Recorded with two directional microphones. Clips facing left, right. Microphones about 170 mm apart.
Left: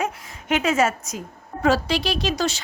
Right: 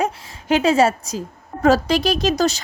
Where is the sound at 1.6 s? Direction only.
45° right (ahead or behind).